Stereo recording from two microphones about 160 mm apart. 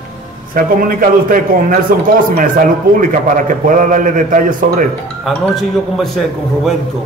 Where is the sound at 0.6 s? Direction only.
60° right (ahead or behind).